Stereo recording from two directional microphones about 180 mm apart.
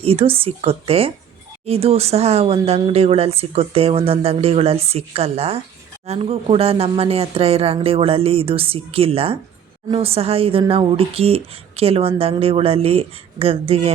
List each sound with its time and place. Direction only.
0.0 s speech: 30° right (ahead or behind)